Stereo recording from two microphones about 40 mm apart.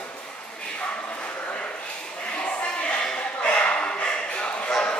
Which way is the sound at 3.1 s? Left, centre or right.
Left.